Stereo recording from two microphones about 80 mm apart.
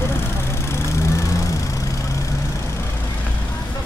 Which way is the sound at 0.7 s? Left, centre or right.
Left.